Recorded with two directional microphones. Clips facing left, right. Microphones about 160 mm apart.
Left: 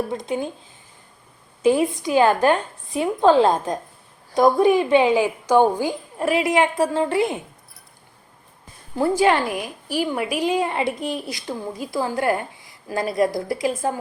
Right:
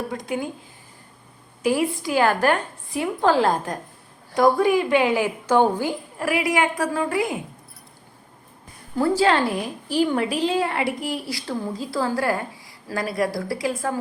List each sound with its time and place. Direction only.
0.1 s a woman's voice: 20° left (ahead or behind)
1.6 s a woman's voice: 20° left (ahead or behind)
9.0 s a woman's voice: 20° left (ahead or behind)